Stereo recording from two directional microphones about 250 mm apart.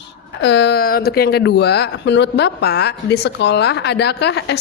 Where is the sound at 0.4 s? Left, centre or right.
Left.